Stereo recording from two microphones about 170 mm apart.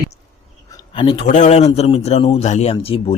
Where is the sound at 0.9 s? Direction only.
30° left (ahead or behind).